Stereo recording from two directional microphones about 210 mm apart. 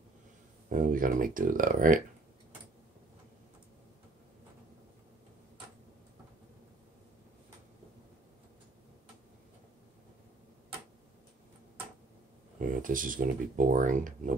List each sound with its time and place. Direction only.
0.7 s speech: 40° right (ahead or behind)
12.5 s speech: 40° right (ahead or behind)